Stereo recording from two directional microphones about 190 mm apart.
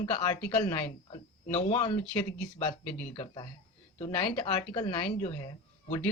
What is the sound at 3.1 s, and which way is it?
Speech, 25° left (ahead or behind).